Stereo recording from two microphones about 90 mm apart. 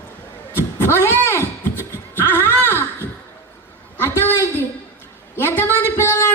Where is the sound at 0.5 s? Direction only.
25° left (ahead or behind).